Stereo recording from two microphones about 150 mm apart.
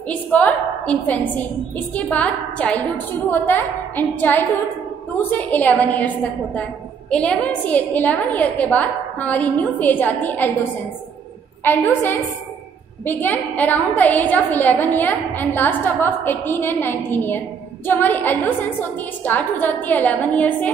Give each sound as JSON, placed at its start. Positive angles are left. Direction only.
{"t": 0.1, "sound": "a woman's voice", "side_deg": 10}
{"t": 11.6, "sound": "a woman's voice", "side_deg": 10}